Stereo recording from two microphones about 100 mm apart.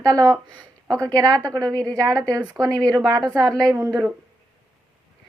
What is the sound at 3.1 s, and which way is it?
Speech, 40° right (ahead or behind).